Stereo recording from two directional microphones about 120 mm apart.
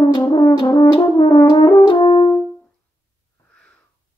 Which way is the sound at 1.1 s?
40° left (ahead or behind).